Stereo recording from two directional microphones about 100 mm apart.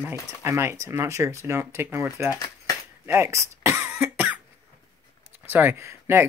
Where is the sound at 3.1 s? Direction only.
30° right (ahead or behind).